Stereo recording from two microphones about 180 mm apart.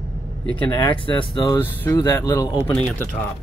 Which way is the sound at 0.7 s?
25° left (ahead or behind).